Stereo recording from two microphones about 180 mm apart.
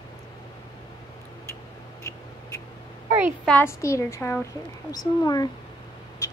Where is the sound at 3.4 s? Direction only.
10° left (ahead or behind).